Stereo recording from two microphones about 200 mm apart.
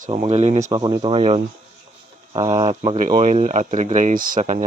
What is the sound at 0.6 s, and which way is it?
Speech, 15° right (ahead or behind).